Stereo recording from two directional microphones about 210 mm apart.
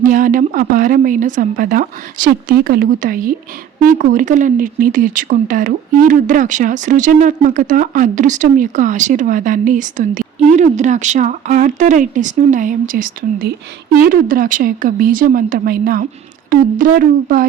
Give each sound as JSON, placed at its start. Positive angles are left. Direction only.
{"t": 0.0, "sound": "speech", "side_deg": -40}